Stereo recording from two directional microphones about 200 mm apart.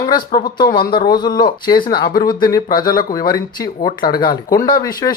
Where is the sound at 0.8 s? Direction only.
25° left (ahead or behind).